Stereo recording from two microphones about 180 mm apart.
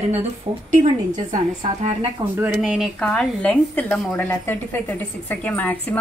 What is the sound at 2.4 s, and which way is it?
Speech, 5° right (ahead or behind).